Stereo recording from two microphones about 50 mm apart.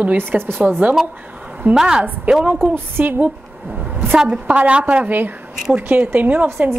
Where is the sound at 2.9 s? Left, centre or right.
Right.